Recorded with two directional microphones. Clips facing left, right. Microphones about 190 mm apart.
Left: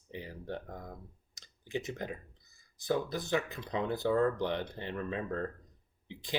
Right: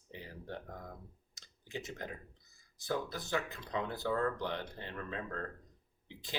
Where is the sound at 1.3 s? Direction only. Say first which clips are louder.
Left 7 dB; 20° left (ahead or behind).